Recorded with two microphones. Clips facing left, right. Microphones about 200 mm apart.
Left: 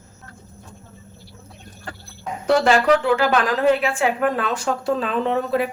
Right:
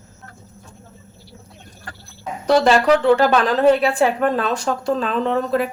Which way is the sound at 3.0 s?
35° right (ahead or behind).